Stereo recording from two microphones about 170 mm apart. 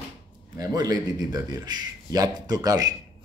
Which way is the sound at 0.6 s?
20° right (ahead or behind).